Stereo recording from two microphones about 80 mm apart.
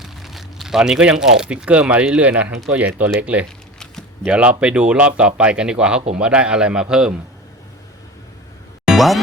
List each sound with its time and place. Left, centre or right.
0.0 s speech: centre
8.8 s music: centre